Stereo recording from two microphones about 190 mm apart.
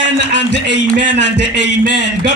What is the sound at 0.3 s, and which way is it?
A man's voice, 65° left (ahead or behind).